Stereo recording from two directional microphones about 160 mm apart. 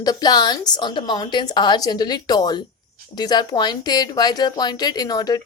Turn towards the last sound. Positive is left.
turn(degrees=25)  # may be behind; listen again after turning